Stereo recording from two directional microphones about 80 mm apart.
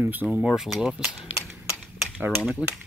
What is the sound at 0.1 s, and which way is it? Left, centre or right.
Speech, right.